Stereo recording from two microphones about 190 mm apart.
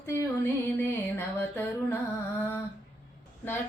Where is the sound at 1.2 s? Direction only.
10° left (ahead or behind).